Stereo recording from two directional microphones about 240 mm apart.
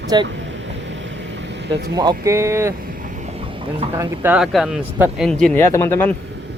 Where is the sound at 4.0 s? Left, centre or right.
Centre.